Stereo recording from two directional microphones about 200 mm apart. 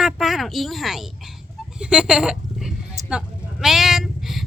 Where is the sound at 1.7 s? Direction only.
5° right (ahead or behind).